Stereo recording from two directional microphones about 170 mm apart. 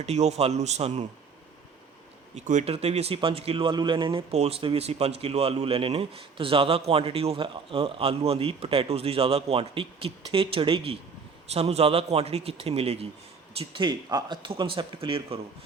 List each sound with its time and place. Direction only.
0.0 s speech: 40° right (ahead or behind)
2.3 s speech: 45° right (ahead or behind)